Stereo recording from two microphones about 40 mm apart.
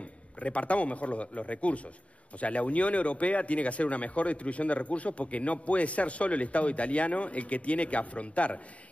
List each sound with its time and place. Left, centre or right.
0.4 s speech: left